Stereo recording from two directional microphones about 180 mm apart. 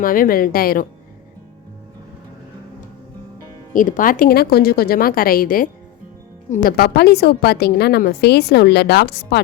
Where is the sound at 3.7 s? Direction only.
50° left (ahead or behind).